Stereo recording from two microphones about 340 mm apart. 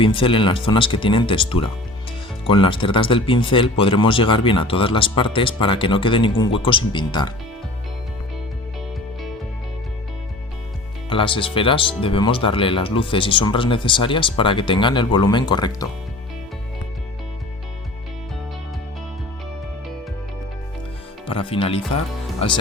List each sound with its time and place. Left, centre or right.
0.0 s speech: centre
11.1 s speech: centre
21.2 s speech: centre